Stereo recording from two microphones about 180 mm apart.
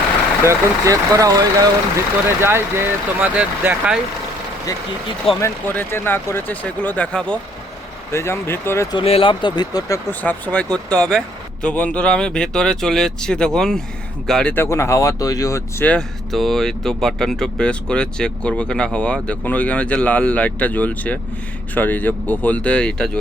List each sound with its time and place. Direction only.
0.4 s speech: 20° right (ahead or behind)
5.4 s speech: 10° left (ahead or behind)
9.0 s speech: 30° left (ahead or behind)
10.1 s speech: 10° left (ahead or behind)